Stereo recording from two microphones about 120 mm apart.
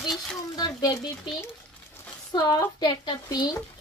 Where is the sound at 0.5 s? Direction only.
30° left (ahead or behind).